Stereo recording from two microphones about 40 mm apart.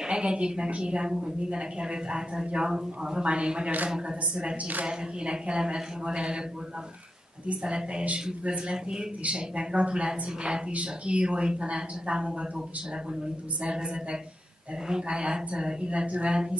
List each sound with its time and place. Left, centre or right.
0.0 s a woman's voice: right
7.6 s a woman's voice: right
13.6 s a woman's voice: right